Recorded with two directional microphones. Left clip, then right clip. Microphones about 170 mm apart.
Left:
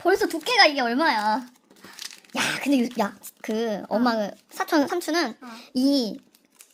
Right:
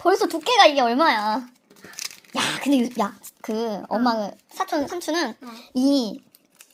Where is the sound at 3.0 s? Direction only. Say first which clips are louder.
Right 1 dB; 15° left (ahead or behind).